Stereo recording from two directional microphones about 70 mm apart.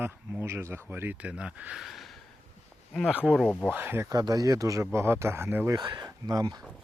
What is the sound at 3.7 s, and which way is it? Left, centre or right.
Speech, right.